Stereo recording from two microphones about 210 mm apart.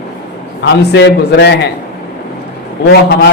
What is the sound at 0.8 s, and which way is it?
Speech, 55° left (ahead or behind).